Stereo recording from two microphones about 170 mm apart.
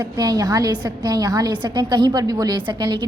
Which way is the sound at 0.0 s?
20° right (ahead or behind).